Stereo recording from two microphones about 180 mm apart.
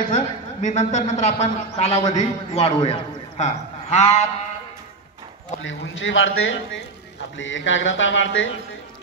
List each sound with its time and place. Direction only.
0.0 s a woman's voice: 40° left (ahead or behind)
5.6 s speech: 90° left